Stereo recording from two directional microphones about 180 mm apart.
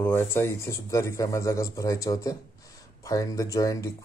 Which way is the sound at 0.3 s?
15° left (ahead or behind).